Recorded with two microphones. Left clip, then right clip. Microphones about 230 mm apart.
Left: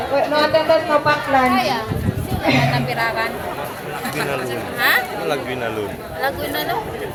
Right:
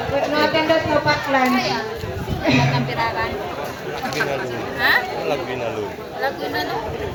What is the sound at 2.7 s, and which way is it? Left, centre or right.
Chatter, left.